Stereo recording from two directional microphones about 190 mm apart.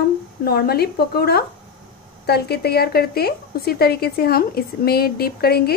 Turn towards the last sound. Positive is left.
turn(degrees=55)  # may be behind; listen again after turning